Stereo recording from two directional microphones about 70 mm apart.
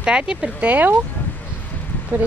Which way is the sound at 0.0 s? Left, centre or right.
Centre.